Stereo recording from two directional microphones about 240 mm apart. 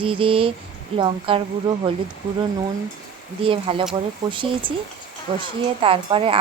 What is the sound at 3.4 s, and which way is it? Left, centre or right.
Speech, right.